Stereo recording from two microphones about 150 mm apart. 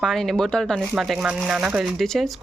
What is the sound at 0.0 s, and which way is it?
Speech, centre (ahead or behind).